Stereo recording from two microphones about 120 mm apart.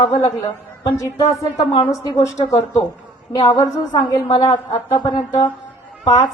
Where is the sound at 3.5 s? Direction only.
40° left (ahead or behind).